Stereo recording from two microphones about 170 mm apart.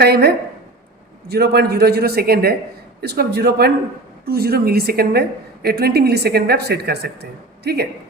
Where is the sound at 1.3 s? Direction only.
70° right (ahead or behind).